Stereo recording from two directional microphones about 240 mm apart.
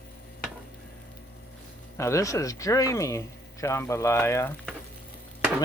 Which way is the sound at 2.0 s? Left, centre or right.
Centre.